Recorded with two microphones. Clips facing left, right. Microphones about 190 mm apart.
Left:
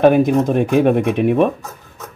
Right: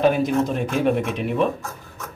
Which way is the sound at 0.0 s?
55° left (ahead or behind).